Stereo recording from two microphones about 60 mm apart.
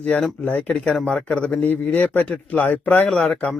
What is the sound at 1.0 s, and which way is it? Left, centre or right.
Speech, centre.